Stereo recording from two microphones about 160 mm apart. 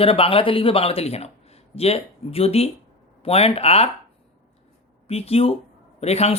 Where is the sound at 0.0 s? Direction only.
35° left (ahead or behind).